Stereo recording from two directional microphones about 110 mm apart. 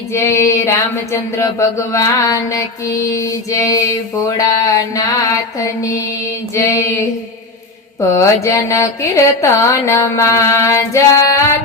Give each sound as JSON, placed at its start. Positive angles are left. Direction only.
{"t": 0.1, "sound": "a sound", "side_deg": 25}
{"t": 1.1, "sound": "mantra", "side_deg": 30}
{"t": 6.5, "sound": "music", "side_deg": 25}
{"t": 8.1, "sound": "music", "side_deg": 30}